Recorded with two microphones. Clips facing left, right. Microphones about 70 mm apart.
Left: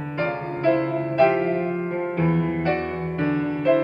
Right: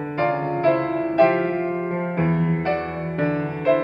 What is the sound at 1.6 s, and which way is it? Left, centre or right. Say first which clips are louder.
Music: right 1 dB; right.